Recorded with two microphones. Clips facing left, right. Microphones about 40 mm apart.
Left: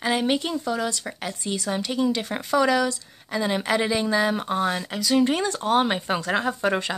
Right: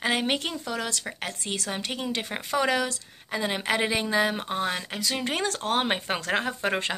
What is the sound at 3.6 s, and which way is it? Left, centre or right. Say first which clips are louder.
A woman's voice: left 3 dB; right.